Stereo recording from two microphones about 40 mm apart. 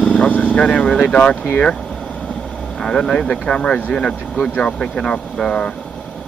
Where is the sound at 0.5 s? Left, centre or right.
Left.